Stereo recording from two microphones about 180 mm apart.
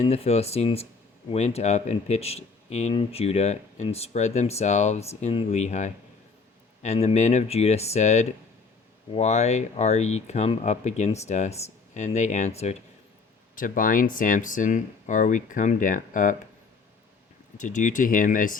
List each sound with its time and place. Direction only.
0.0 s speech: 35° left (ahead or behind)
13.6 s speech: 50° left (ahead or behind)
17.6 s speech: 45° left (ahead or behind)